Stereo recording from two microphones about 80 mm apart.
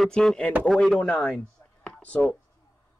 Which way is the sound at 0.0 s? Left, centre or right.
Centre.